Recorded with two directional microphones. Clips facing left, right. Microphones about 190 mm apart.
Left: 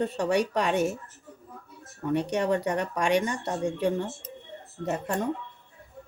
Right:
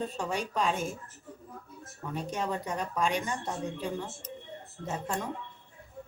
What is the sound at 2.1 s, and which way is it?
Speech, 70° left (ahead or behind).